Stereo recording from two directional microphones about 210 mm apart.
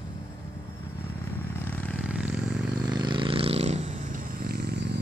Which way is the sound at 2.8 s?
20° right (ahead or behind).